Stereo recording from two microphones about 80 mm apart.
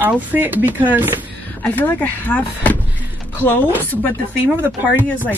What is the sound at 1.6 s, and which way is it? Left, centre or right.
Speech, left.